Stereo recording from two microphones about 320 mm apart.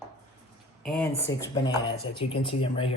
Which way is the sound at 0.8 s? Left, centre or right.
Centre.